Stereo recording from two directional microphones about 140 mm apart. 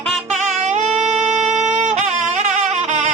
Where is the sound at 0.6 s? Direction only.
60° right (ahead or behind).